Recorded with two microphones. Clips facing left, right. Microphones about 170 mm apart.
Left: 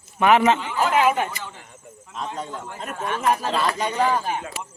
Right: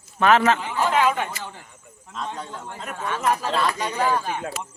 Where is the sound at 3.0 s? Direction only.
20° left (ahead or behind).